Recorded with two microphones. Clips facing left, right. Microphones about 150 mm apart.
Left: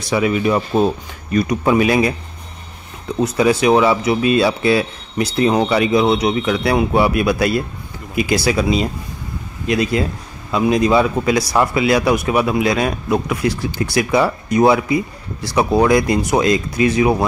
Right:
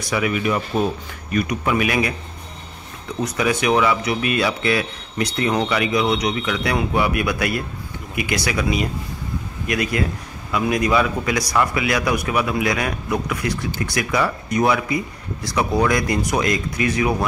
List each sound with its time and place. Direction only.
0.1 s speech: 30° left (ahead or behind)
3.2 s speech: 30° left (ahead or behind)